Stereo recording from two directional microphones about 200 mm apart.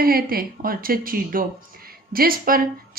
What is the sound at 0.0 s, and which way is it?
A woman's voice, 50° right (ahead or behind).